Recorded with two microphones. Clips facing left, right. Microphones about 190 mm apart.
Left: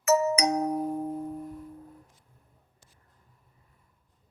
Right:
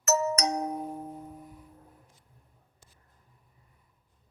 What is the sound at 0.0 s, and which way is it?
Music, 10° left (ahead or behind).